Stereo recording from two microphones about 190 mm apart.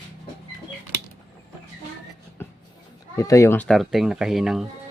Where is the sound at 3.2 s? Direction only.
15° left (ahead or behind); by 4.6 s centre (ahead or behind).